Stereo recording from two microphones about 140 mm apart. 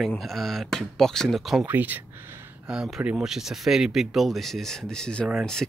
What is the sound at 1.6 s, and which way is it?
Speech, 15° right (ahead or behind).